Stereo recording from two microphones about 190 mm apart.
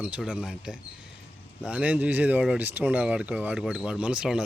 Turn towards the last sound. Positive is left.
turn(degrees=-5)  # may be behind; listen again after turning